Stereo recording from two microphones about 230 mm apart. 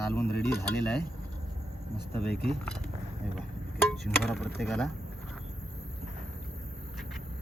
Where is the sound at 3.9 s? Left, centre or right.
Centre.